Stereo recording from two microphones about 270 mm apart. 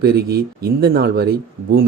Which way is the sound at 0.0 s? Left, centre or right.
Right.